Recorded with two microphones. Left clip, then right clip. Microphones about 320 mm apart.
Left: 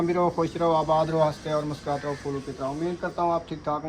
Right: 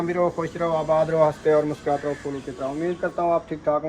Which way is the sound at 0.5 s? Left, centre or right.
Right.